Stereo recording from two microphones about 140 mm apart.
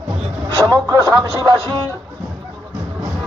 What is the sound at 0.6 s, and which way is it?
Speech, 25° right (ahead or behind).